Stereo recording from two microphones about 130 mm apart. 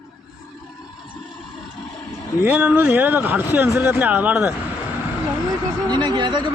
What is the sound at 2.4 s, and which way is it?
Speech, 10° right (ahead or behind).